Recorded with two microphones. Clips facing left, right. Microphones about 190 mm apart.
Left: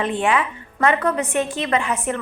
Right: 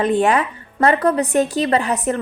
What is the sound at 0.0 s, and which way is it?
A woman's voice, 40° right (ahead or behind).